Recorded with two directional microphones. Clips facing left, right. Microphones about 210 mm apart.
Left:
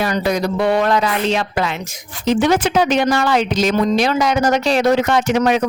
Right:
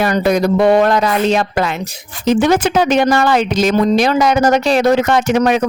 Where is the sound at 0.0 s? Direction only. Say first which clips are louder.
Right 4 dB; 55° right (ahead or behind).